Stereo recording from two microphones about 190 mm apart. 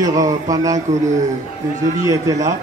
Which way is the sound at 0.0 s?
20° right (ahead or behind).